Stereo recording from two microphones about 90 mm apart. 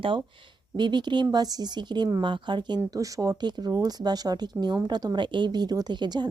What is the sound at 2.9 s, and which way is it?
Speech, 40° right (ahead or behind).